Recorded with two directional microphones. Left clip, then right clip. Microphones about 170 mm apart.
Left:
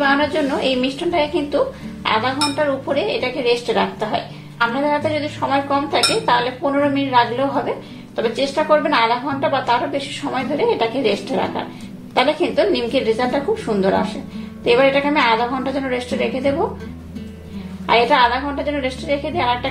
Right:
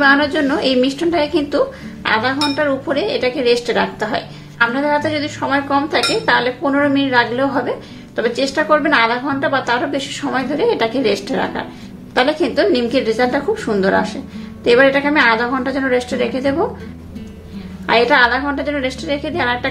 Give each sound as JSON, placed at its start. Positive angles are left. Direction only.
{"t": 0.0, "sound": "a woman's voice", "side_deg": -25}
{"t": 17.8, "sound": "a woman's voice", "side_deg": -20}